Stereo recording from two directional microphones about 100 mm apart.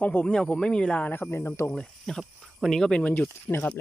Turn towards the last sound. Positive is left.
turn(degrees=20)  # may be behind; listen again after turning